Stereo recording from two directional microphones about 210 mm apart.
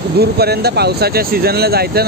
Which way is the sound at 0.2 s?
50° right (ahead or behind).